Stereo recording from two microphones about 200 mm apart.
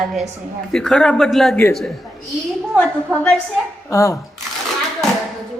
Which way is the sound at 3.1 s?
Centre (ahead or behind).